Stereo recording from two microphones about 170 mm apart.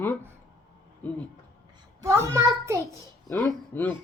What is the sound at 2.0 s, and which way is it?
Speech, 15° right (ahead or behind).